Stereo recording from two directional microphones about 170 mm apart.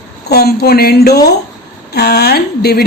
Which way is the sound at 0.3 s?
70° left (ahead or behind).